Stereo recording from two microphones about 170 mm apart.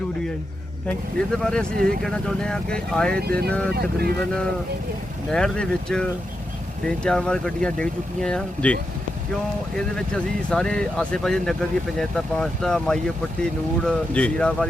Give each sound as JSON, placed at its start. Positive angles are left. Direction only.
{"t": 0.9, "sound": "speech", "side_deg": 5}
{"t": 3.2, "sound": "speech", "side_deg": -65}
{"t": 5.3, "sound": "speech", "side_deg": 5}